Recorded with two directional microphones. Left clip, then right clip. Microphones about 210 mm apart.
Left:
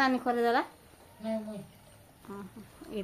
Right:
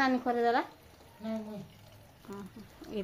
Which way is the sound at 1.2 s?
55° left (ahead or behind).